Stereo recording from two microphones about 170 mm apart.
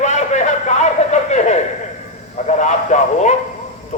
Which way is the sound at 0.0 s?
40° left (ahead or behind).